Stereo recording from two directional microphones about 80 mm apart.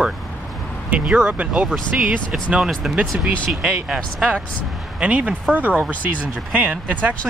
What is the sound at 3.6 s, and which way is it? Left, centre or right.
Speech, centre.